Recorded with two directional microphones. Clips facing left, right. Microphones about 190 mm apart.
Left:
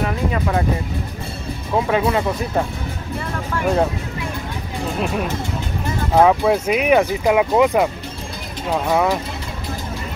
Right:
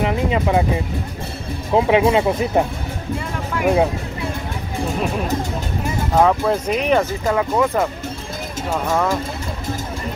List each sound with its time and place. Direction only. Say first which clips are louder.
0.0 s speech: right 2 dB; 15° right (ahead or behind)
1.7 s speech: right 4 dB; 20° right (ahead or behind)
3.5 s speech: right 2 dB; 10° right (ahead or behind)
6.2 s speech: left 3 dB; 10° left (ahead or behind)